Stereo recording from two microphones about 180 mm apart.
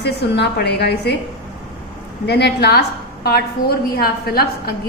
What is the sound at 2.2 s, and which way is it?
A woman's voice, 65° left (ahead or behind).